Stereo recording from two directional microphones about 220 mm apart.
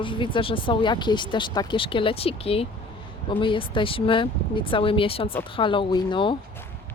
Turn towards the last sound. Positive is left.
turn(degrees=20)  # may be behind; listen again after turning